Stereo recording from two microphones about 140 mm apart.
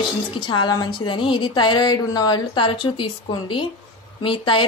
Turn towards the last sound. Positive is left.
turn(degrees=35)  # may be behind; listen again after turning